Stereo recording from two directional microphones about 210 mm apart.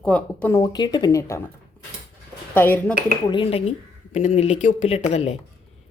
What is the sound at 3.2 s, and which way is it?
Speech, 25° left (ahead or behind).